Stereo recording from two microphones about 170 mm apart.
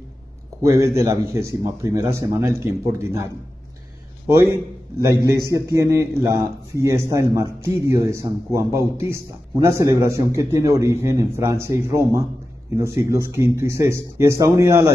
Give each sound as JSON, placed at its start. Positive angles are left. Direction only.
{"t": 0.6, "sound": "a man's voice", "side_deg": -20}
{"t": 5.5, "sound": "a man's voice", "side_deg": -20}